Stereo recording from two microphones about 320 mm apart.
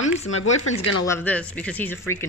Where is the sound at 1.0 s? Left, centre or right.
Centre.